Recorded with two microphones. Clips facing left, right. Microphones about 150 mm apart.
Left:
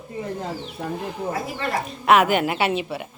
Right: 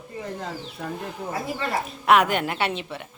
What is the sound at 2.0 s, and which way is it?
Speech, centre (ahead or behind).